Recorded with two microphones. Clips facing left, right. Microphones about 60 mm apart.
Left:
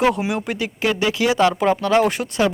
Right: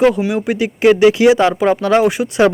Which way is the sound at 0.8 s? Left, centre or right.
Right.